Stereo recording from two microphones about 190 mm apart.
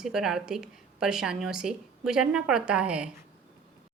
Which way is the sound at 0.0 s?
5° right (ahead or behind).